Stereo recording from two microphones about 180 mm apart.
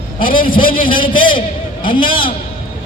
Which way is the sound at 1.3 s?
50° left (ahead or behind).